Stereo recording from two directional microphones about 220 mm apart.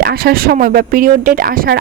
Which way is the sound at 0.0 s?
45° right (ahead or behind).